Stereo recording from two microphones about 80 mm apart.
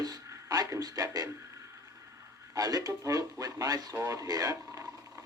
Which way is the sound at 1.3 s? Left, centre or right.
Right.